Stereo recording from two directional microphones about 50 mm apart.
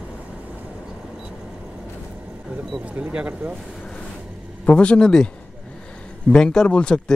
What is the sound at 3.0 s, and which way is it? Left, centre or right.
Speech, right.